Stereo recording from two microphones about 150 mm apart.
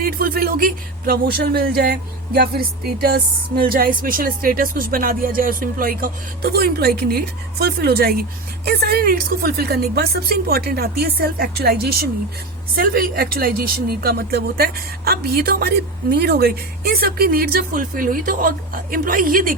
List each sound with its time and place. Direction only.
0.0 s speech: 80° right
12.7 s speech: 80° right